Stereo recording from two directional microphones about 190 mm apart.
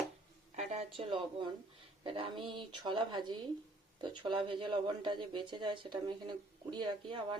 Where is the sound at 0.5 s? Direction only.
35° right (ahead or behind).